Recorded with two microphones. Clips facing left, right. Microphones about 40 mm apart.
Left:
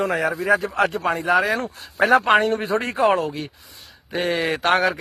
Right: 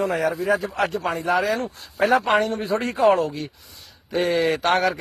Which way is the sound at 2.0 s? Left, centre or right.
Left.